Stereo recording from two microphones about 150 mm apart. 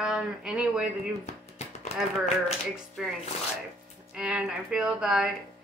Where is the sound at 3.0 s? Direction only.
5° right (ahead or behind).